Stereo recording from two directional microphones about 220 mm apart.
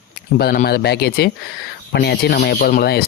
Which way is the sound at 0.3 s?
45° left (ahead or behind).